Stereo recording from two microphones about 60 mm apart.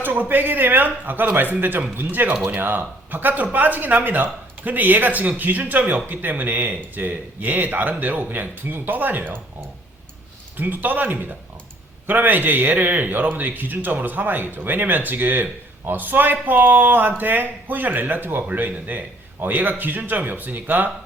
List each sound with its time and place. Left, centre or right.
0.0 s speech: right
10.6 s speech: right